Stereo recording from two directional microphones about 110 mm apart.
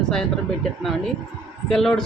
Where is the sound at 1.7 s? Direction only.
5° left (ahead or behind).